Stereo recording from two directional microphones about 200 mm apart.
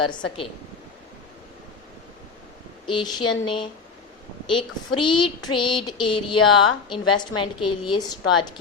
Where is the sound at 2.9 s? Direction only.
20° left (ahead or behind).